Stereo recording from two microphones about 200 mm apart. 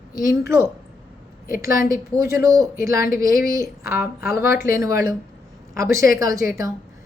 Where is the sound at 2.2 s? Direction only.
15° right (ahead or behind).